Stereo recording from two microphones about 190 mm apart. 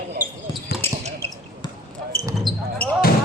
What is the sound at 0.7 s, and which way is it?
Basketball bounce, 55° left (ahead or behind).